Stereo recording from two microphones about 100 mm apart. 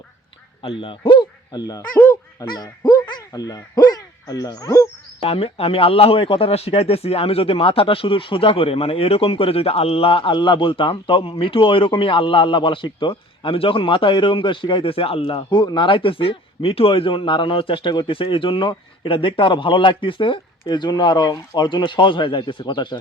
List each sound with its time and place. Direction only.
0.8 s speech: 60° left (ahead or behind); by 1.8 s 40° left (ahead or behind)
2.0 s honk: 25° left (ahead or behind)
2.5 s speech: 40° left (ahead or behind)
5.2 s speech: 75° left (ahead or behind)
15.4 s speech: 45° left (ahead or behind)